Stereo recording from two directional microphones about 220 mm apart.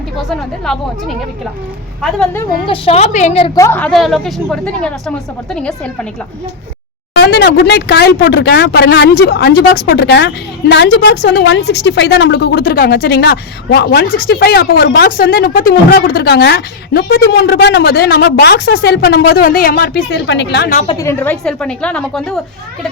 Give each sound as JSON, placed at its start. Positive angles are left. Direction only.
{"t": 0.2, "sound": "a woman's voice", "side_deg": 0}
{"t": 2.6, "sound": "a woman's voice", "side_deg": 25}
{"t": 3.6, "sound": "a woman's voice", "side_deg": 10}
{"t": 7.2, "sound": "speech", "side_deg": 50}
{"t": 20.8, "sound": "a woman's voice", "side_deg": 10}